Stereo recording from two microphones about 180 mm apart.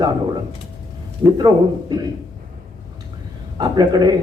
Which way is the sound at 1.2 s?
20° right (ahead or behind).